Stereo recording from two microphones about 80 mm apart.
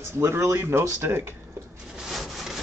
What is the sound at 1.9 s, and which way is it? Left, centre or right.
Wood, centre.